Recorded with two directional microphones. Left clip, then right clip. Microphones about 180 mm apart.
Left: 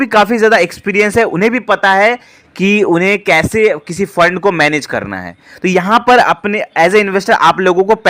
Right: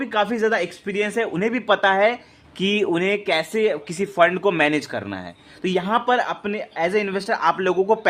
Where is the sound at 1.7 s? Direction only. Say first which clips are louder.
Left 7 dB; 20° left (ahead or behind).